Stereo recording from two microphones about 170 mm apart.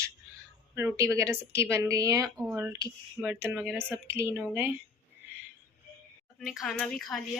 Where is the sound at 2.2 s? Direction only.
Centre (ahead or behind); by 4.4 s 15° right (ahead or behind).